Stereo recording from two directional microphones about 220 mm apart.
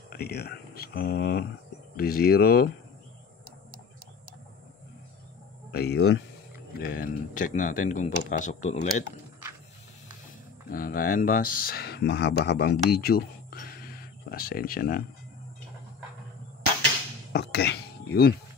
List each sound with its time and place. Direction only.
0.1 s speech: 45° left (ahead or behind)
5.7 s speech: 45° left (ahead or behind)
10.7 s speech: 40° left (ahead or behind)
17.3 s a sound: 50° left (ahead or behind)